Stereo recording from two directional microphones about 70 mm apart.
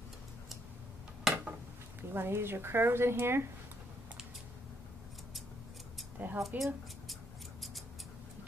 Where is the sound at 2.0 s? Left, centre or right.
Right.